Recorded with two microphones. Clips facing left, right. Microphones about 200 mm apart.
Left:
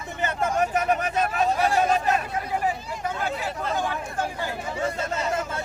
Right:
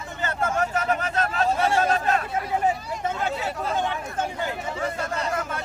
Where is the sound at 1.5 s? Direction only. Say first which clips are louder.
Right 1 dB; 25° right (ahead or behind).